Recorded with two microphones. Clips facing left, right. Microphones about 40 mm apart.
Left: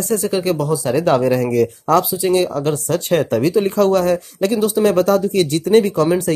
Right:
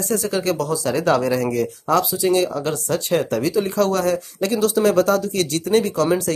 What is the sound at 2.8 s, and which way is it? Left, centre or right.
Speech, left.